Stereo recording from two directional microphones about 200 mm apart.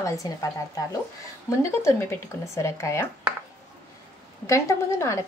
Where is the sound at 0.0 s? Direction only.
15° left (ahead or behind).